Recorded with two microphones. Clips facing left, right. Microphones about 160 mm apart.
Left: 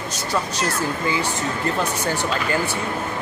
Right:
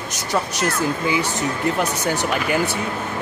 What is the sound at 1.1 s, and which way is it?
Speech, 15° right (ahead or behind).